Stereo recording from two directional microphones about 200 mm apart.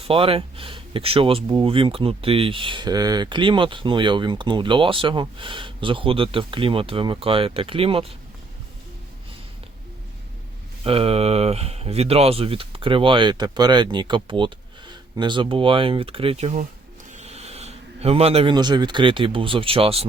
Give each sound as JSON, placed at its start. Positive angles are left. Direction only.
{"t": 0.0, "sound": "speech", "side_deg": -25}
{"t": 10.8, "sound": "speech", "side_deg": -30}